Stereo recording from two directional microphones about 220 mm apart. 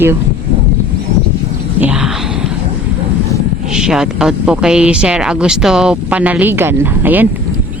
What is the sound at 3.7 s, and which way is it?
Speech, 5° right (ahead or behind).